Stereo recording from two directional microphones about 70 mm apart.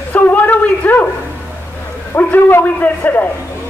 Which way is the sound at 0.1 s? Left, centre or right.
Left.